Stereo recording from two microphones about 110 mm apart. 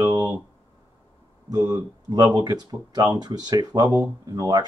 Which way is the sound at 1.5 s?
35° right (ahead or behind).